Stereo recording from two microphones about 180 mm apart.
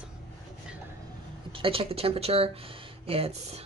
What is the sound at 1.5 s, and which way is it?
Speech, 30° right (ahead or behind).